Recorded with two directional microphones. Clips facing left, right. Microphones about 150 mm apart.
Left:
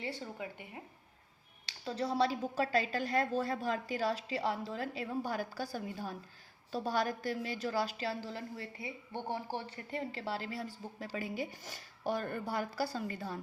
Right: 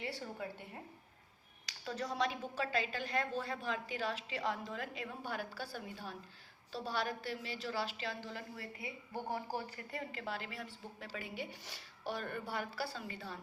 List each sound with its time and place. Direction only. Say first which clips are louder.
0.2 s a woman's voice: left 1 dB; 15° left (ahead or behind)
1.6 s a woman's voice: left 5 dB; 30° left (ahead or behind)